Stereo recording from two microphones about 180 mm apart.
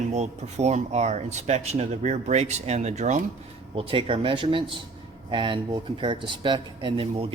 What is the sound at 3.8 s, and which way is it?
Speech, 30° right (ahead or behind).